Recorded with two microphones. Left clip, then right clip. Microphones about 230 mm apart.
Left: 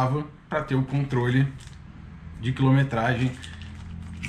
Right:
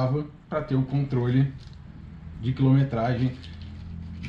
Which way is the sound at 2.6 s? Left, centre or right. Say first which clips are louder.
Left 1 dB; centre.